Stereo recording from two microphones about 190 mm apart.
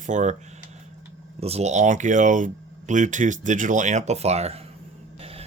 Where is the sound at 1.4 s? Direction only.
35° right (ahead or behind).